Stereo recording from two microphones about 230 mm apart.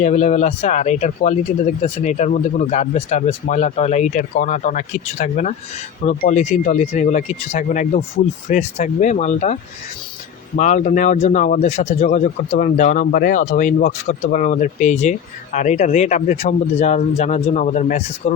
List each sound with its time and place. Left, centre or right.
0.0 s speech: left
10.6 s speech: left